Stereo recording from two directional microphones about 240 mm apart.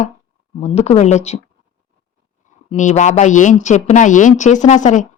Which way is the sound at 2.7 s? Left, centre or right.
Left.